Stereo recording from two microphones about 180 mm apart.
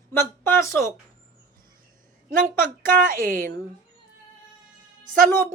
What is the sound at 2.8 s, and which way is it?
Speech, 50° right (ahead or behind).